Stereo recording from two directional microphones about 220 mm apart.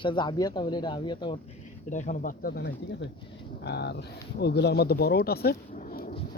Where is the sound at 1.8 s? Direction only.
35° left (ahead or behind).